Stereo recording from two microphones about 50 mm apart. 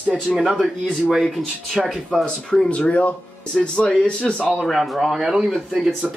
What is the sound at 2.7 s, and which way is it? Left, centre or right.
Speech, left.